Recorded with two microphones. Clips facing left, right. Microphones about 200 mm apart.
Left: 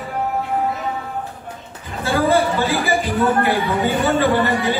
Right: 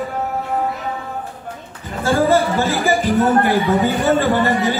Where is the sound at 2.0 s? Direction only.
45° right (ahead or behind).